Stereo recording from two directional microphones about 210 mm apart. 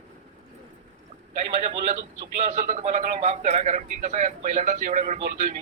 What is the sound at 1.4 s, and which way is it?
A man's voice, 35° right (ahead or behind).